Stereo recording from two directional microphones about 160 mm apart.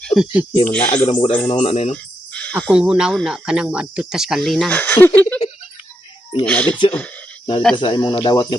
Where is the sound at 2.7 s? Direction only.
5° right (ahead or behind).